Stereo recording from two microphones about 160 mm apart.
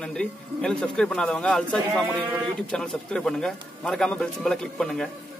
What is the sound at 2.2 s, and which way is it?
Speech, 10° right (ahead or behind).